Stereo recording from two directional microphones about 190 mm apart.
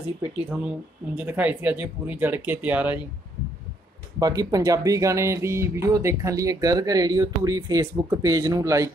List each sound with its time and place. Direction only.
0.5 s speech: 5° right (ahead or behind)
4.2 s speech: 20° right (ahead or behind)